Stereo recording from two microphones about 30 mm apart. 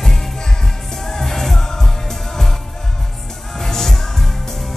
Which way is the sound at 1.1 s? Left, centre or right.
Centre.